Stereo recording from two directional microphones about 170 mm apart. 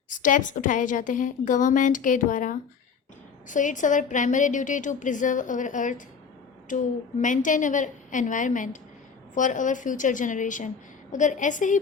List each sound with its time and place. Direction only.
0.2 s a woman's voice: 50° left (ahead or behind)